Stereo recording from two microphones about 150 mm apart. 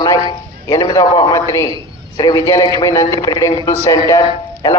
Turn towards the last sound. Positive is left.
turn(degrees=25)  # may be behind; listen again after turning